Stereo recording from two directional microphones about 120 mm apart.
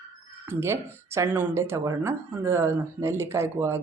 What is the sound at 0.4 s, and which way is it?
Speech, 20° right (ahead or behind).